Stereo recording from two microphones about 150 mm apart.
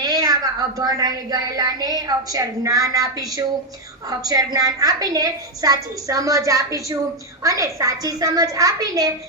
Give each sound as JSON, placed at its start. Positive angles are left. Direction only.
{"t": 0.0, "sound": "a woman's voice", "side_deg": -25}